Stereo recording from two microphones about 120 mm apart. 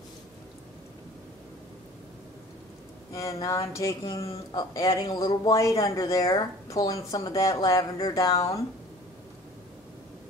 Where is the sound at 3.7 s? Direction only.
25° left (ahead or behind).